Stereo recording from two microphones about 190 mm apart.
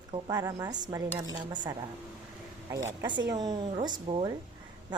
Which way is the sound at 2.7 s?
20° right (ahead or behind).